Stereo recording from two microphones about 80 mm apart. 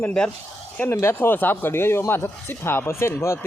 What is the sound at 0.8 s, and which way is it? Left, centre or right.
Speech, left.